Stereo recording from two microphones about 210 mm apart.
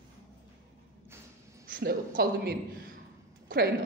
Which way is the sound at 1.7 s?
45° right (ahead or behind).